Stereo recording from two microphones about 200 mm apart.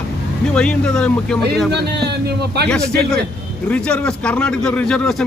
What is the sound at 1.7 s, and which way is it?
Speech, 55° right (ahead or behind).